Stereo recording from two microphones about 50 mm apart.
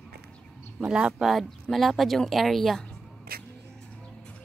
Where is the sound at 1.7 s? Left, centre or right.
Centre.